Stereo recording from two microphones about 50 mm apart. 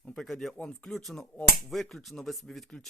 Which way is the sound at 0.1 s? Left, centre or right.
Centre.